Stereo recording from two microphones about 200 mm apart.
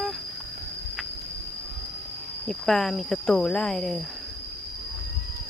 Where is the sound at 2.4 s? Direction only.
Centre (ahead or behind).